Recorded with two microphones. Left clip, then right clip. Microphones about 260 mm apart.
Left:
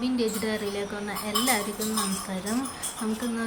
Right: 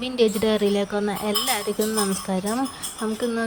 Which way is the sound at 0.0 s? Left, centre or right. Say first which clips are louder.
Right 7 dB; right.